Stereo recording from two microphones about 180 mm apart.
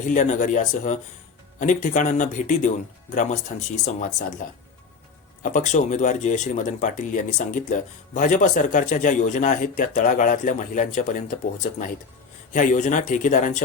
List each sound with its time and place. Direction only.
0.0 s speech: 45° left (ahead or behind)
5.4 s speech: 45° left (ahead or behind)